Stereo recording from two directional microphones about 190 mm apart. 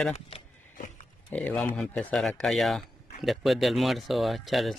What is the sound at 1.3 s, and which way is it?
Speech, 5° left (ahead or behind).